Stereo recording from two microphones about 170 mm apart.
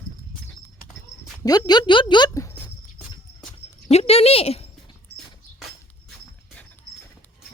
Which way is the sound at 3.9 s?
35° left (ahead or behind).